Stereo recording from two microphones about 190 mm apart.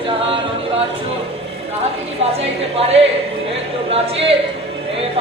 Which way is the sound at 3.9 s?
30° right (ahead or behind).